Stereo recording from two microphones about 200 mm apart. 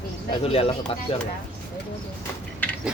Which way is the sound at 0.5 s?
30° left (ahead or behind).